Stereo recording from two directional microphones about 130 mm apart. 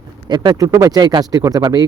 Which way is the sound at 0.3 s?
35° right (ahead or behind).